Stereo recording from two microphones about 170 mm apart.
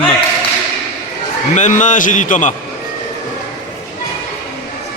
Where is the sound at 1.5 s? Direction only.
45° left (ahead or behind).